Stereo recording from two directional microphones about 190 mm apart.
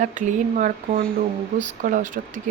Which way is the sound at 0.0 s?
40° right (ahead or behind).